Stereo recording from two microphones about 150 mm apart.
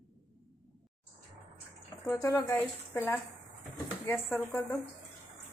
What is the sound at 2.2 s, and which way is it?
Speech, 20° left (ahead or behind).